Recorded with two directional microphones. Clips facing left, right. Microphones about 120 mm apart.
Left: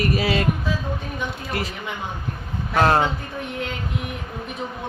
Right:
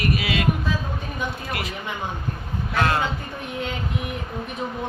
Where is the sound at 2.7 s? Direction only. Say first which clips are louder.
Left 5 dB; 35° left (ahead or behind).